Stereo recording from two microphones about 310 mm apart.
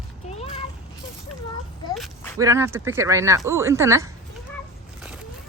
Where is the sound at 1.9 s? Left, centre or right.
Centre.